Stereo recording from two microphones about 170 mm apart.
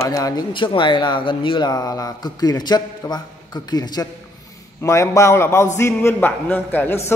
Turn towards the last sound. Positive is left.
turn(degrees=10)  # may be behind; listen again after turning